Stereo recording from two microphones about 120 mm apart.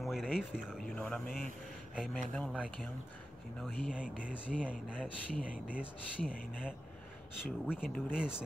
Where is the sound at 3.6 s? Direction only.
5° right (ahead or behind).